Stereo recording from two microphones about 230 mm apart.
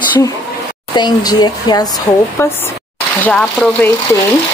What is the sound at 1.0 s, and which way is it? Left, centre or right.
Speech, centre.